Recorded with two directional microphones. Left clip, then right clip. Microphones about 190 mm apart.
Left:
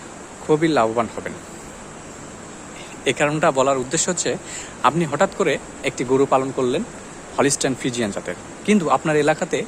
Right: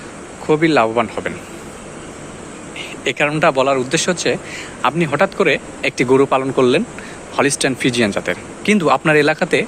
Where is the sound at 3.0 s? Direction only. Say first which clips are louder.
Right 3 dB; 10° left (ahead or behind).